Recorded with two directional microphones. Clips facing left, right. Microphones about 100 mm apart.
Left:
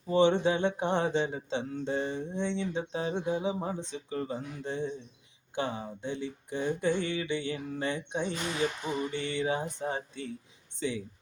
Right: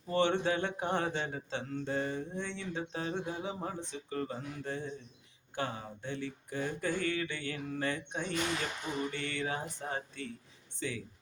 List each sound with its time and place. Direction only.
0.1 s speech: 20° left (ahead or behind)